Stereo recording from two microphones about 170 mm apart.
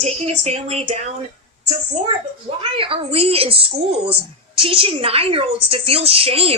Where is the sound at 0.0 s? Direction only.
40° right (ahead or behind).